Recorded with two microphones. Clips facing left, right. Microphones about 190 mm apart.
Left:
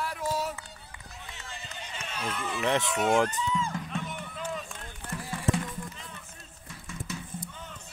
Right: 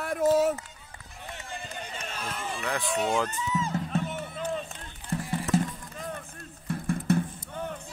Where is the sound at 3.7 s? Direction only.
35° right (ahead or behind).